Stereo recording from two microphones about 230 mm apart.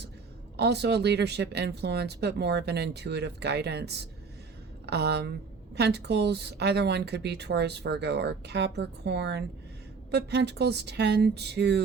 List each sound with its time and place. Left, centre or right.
0.5 s speech: right